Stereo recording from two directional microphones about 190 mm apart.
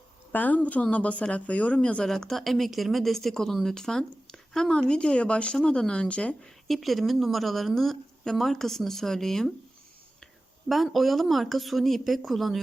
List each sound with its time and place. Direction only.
0.3 s speech: 10° left (ahead or behind)
10.7 s speech: centre (ahead or behind)